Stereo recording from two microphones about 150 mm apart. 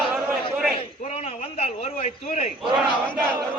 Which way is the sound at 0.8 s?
45° left (ahead or behind).